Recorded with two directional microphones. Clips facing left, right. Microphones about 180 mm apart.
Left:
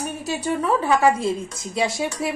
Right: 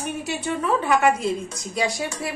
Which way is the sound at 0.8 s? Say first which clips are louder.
Left 1 dB; 30° left (ahead or behind).